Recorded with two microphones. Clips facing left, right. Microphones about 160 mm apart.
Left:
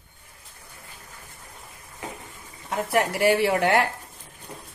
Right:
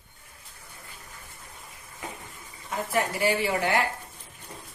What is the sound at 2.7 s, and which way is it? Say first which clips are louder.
Speech: left 4 dB; 70° left (ahead or behind).